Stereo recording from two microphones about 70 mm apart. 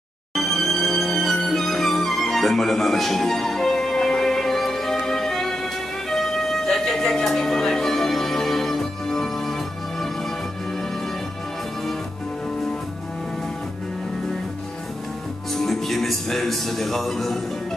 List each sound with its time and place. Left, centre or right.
0.3 s music: centre
15.5 s music: centre